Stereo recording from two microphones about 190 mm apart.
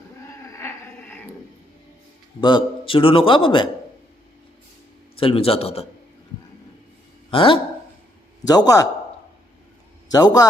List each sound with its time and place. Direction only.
0.5 s a sound: 10° left (ahead or behind)
2.4 s a man's voice: 25° left (ahead or behind)
5.1 s speech: 30° left (ahead or behind)
7.3 s a man's voice: 25° left (ahead or behind)
10.1 s a man's voice: 20° left (ahead or behind)